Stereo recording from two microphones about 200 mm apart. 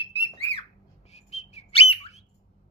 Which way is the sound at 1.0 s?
35° left (ahead or behind).